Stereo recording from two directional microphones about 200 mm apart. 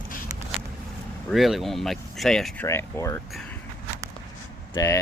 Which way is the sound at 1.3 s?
Centre (ahead or behind).